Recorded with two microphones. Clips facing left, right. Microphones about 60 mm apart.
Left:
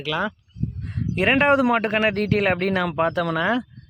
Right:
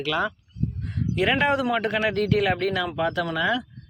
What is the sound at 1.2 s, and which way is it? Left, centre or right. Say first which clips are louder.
Speech: left 4 dB; left.